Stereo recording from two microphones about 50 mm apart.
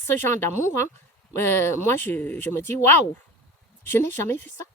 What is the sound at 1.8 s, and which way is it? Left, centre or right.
A woman's voice, left.